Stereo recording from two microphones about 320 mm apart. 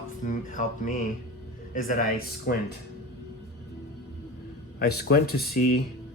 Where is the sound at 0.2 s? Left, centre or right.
Left.